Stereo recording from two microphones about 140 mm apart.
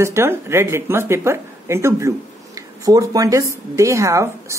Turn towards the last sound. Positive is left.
turn(degrees=-20)  # may be behind; listen again after turning